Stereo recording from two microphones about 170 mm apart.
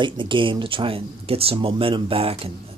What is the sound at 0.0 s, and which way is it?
A man's voice, 30° right (ahead or behind).